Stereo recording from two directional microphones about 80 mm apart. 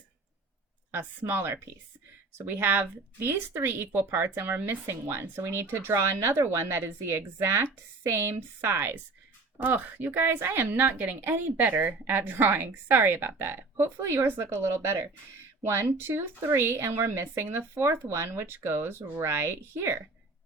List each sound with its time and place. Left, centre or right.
0.9 s speech: right